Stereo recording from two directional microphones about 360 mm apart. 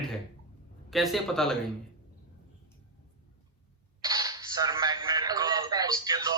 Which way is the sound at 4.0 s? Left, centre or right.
Centre.